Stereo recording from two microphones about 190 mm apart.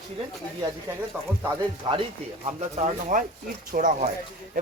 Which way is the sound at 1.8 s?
30° right (ahead or behind).